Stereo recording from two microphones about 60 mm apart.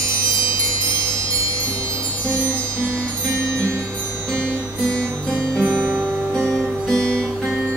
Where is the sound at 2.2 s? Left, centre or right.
Left.